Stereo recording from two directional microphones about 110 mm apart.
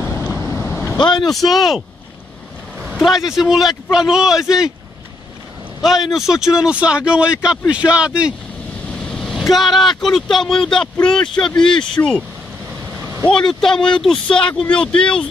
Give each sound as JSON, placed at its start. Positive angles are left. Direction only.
{"t": 0.2, "sound": "vehicle", "side_deg": 25}
{"t": 0.9, "sound": "speech", "side_deg": 40}
{"t": 1.3, "sound": "speech", "side_deg": 0}
{"t": 3.3, "sound": "speech", "side_deg": -5}
{"t": 5.8, "sound": "speech", "side_deg": 0}
{"t": 9.1, "sound": "vehicle", "side_deg": 5}
{"t": 9.5, "sound": "speech", "side_deg": 0}
{"t": 13.3, "sound": "speech", "side_deg": 5}